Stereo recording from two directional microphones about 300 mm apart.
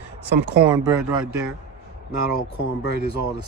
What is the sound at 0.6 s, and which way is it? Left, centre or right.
Speech, centre.